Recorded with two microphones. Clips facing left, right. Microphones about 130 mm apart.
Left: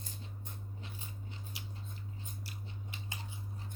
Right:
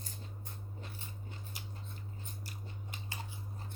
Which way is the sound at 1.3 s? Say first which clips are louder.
Even; 45° right (ahead or behind).